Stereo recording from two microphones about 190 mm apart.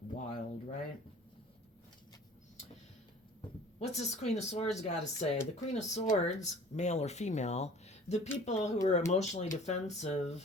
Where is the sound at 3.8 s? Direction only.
35° left (ahead or behind).